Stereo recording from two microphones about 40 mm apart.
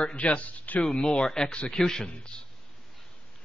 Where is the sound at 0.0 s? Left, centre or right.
Left.